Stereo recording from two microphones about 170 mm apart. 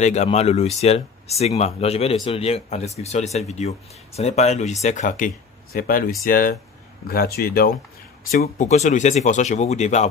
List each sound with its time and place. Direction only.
0.0 s speech: 40° left (ahead or behind); by 8.6 s 55° left (ahead or behind)
8.6 s speech: 45° left (ahead or behind)